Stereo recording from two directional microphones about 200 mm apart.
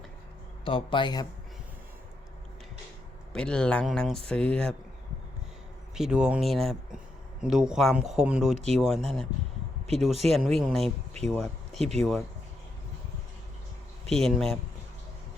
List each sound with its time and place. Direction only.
0.6 s a man's voice: 25° left (ahead or behind)
3.3 s speech: 5° left (ahead or behind)
5.9 s speech: 5° right (ahead or behind)
10.8 s speech: 30° right (ahead or behind)
11.3 s speech: centre (ahead or behind)
14.1 s speech: centre (ahead or behind)